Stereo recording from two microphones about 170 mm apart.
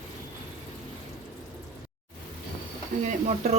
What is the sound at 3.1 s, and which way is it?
Speech, 40° right (ahead or behind).